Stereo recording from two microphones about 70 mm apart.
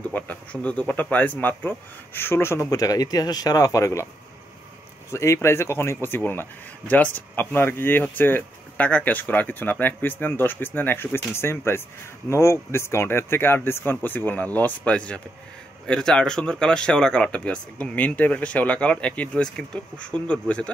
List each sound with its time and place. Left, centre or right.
0.1 s speech: left
2.7 s a man's voice: left
5.1 s speech: left; by 20.7 s centre